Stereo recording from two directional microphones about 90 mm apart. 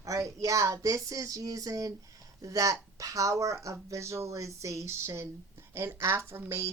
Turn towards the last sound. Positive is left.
turn(degrees=-30)  # may be behind; listen again after turning